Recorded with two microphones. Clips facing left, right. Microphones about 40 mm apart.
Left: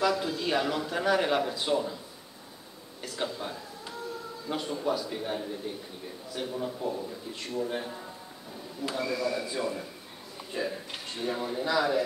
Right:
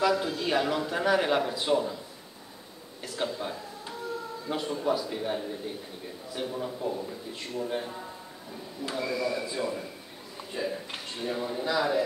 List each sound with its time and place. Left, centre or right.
0.0 s a man's voice: centre
3.0 s a sound: centre
4.5 s a man's voice: centre
11.2 s a man's voice: centre